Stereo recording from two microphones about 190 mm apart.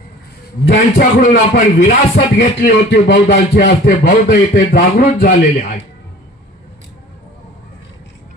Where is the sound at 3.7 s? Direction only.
45° left (ahead or behind).